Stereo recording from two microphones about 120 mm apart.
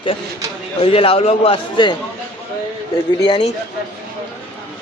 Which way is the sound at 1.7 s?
40° left (ahead or behind).